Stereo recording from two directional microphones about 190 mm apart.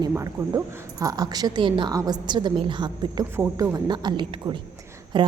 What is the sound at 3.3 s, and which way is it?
A woman's voice, 10° right (ahead or behind).